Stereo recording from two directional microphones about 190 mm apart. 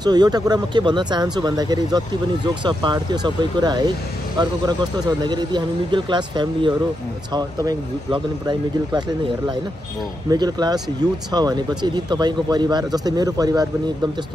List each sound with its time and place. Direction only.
0.0 s speech: 20° right (ahead or behind)
10.3 s speech: 20° right (ahead or behind)